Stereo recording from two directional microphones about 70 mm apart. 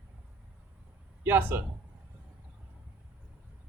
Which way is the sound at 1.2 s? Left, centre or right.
Right.